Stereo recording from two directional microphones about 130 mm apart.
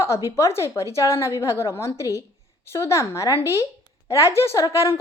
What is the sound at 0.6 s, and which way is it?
A woman's voice, 20° left (ahead or behind).